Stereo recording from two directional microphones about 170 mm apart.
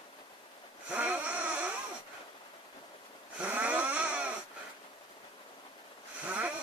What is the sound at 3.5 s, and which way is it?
Vehicle, 10° right (ahead or behind).